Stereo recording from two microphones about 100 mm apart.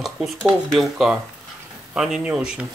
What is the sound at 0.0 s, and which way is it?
Speech, centre (ahead or behind).